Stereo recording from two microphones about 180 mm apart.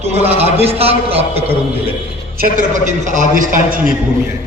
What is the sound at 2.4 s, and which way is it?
A man's voice, 45° right (ahead or behind).